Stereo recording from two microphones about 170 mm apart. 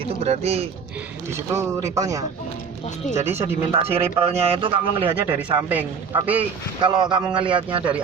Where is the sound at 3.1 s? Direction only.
40° right (ahead or behind).